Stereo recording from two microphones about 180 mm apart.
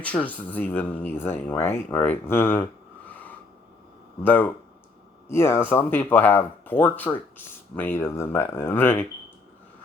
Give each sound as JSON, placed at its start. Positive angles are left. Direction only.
{"t": 0.0, "sound": "speech", "side_deg": 5}
{"t": 3.1, "sound": "a sound", "side_deg": 10}
{"t": 4.2, "sound": "speech", "side_deg": 10}